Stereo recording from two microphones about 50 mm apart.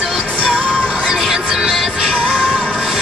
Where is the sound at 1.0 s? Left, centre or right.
Centre.